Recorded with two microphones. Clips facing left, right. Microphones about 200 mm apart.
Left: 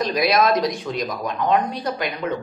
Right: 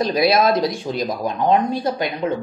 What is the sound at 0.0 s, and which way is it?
A man's voice, 30° right (ahead or behind).